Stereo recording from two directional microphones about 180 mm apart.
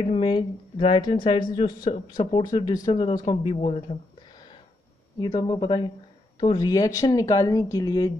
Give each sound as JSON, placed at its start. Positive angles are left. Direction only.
{"t": 0.1, "sound": "speech", "side_deg": 30}
{"t": 2.6, "sound": "speech", "side_deg": 20}
{"t": 5.2, "sound": "speech", "side_deg": 25}